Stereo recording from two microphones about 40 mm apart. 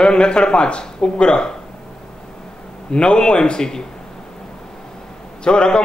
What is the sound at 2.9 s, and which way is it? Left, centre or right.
Speech, left.